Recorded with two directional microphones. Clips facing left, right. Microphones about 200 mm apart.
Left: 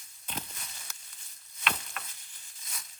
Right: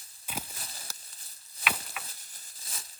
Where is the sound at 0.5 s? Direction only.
35° right (ahead or behind).